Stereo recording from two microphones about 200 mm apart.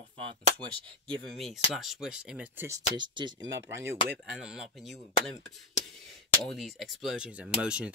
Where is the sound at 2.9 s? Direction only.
25° right (ahead or behind).